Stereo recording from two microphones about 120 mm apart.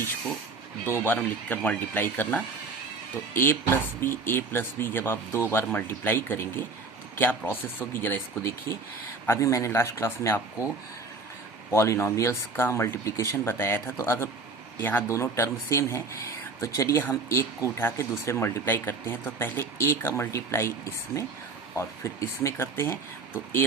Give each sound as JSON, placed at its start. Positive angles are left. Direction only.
{"t": 0.9, "sound": "speech", "side_deg": 15}
{"t": 11.7, "sound": "speech", "side_deg": 25}
{"t": 21.8, "sound": "speech", "side_deg": 25}